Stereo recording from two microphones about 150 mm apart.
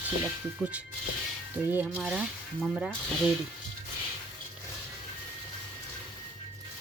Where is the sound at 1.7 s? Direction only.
15° right (ahead or behind).